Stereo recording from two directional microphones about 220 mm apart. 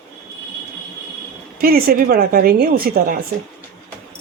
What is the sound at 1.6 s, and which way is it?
Speech, 40° right (ahead or behind).